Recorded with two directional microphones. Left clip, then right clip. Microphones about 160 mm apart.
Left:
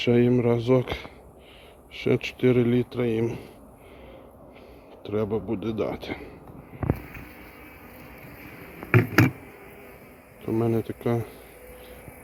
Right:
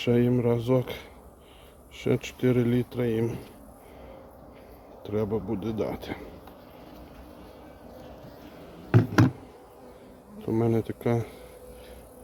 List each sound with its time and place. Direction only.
0.0 s speech: 20° right (ahead or behind)
5.0 s speech: 30° right (ahead or behind)
9.0 s a sound: 35° right (ahead or behind)
10.4 s speech: 20° right (ahead or behind)